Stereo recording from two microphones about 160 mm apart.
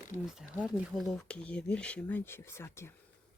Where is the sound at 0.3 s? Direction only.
Centre (ahead or behind); by 2.9 s 15° left (ahead or behind).